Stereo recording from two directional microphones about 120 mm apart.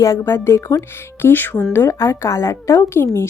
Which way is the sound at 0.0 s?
25° left (ahead or behind).